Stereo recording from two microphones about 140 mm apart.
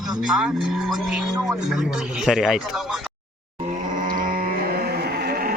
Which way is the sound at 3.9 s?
70° right (ahead or behind).